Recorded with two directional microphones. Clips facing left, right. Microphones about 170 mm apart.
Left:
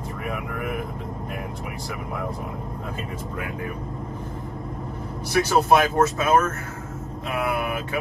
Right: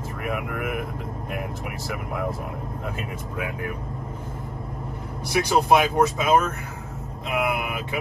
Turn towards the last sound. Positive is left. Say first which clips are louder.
# even
turn(degrees=-15)  # may be behind; listen again after turning